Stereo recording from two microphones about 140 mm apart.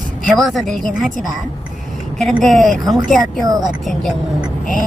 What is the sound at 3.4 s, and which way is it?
Speech, 30° right (ahead or behind).